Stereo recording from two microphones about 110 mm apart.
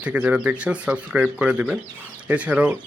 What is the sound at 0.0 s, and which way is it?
A man's voice, 10° right (ahead or behind).